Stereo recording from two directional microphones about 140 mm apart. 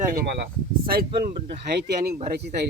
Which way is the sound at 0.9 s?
90° right.